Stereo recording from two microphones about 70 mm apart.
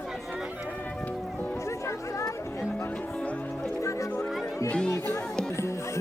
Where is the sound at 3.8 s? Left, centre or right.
Left.